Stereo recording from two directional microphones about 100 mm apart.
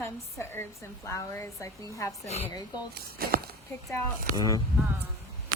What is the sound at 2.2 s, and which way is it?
Speech, 90° left.